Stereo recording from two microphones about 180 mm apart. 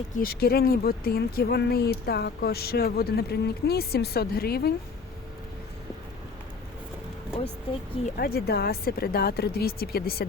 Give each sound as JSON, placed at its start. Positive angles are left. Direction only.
{"t": 0.2, "sound": "speech", "side_deg": 60}
{"t": 8.1, "sound": "speech", "side_deg": 60}